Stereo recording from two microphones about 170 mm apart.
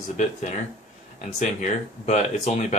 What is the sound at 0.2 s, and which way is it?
Speech, 45° left (ahead or behind).